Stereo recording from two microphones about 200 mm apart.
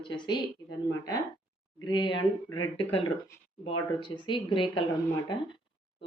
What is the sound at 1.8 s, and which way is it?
Speech, 20° left (ahead or behind).